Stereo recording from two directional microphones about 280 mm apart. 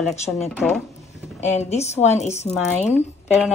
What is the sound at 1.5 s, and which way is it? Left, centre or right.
Speech, left.